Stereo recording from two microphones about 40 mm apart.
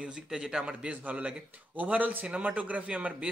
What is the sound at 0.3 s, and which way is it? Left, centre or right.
Speech, centre.